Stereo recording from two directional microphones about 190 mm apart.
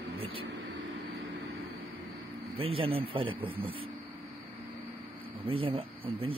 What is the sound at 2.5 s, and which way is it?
Speech, 30° right (ahead or behind).